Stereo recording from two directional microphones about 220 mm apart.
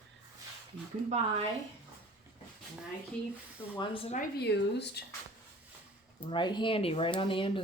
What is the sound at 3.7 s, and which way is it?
Speech, 25° left (ahead or behind).